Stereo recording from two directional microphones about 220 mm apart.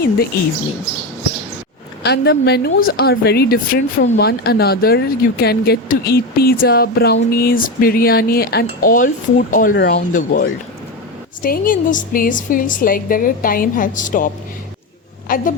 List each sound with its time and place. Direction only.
2.0 s a woman's voice: 50° left (ahead or behind)
15.3 s a woman's voice: 40° left (ahead or behind)